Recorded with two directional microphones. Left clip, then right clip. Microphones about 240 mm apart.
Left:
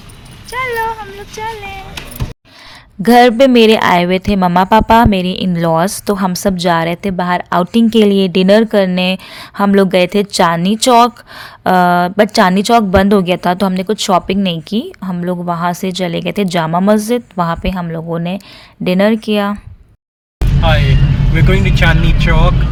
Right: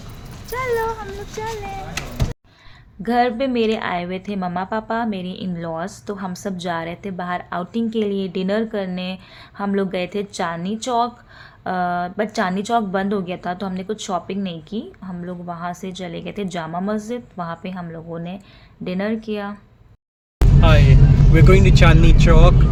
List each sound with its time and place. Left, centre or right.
0.5 s speech: centre
3.0 s a woman's voice: left
20.4 s vehicle: centre
21.3 s speech: right